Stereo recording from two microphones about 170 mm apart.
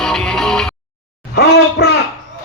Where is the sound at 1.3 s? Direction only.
75° left (ahead or behind).